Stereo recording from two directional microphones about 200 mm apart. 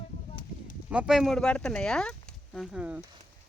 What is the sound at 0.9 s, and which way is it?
Speech, 5° right (ahead or behind).